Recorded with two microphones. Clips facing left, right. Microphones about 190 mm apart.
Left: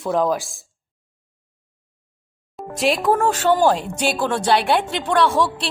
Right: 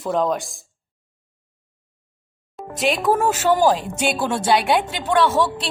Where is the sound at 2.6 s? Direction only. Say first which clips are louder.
Left 1 dB; centre (ahead or behind).